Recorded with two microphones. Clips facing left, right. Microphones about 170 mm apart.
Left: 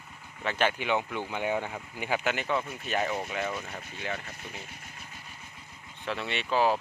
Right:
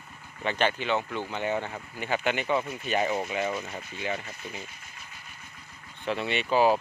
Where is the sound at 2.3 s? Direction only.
Centre (ahead or behind).